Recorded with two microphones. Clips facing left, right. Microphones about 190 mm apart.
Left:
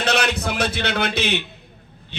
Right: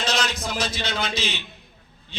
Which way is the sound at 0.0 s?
65° left (ahead or behind).